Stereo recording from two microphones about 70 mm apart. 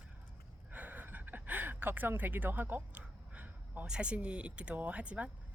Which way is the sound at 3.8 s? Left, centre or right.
Centre.